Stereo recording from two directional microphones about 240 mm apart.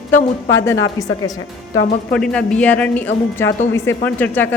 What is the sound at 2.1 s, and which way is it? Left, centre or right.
A woman's voice, centre.